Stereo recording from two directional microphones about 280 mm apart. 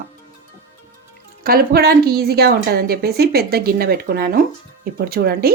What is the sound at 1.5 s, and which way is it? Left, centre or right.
A woman's voice, right.